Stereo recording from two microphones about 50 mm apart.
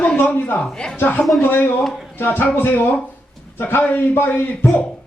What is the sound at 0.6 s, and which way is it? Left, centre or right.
Speech, centre.